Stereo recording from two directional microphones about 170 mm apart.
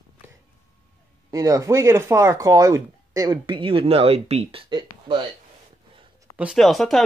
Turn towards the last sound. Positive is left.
turn(degrees=0)  # may be behind; listen again after turning